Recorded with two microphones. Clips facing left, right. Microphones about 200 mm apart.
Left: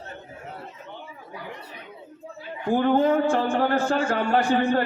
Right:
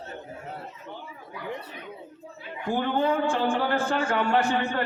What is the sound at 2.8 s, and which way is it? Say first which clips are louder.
A man's voice: left 5 dB; 45° left (ahead or behind).